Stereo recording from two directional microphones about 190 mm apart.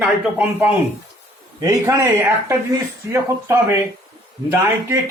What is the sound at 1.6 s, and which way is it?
Speech, 15° right (ahead or behind).